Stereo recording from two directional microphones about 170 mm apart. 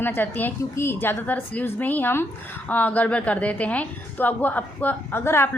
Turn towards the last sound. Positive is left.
turn(degrees=15)  # may be behind; listen again after turning